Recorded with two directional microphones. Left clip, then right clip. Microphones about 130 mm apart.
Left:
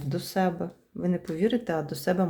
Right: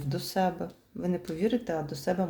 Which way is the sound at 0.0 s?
20° left (ahead or behind).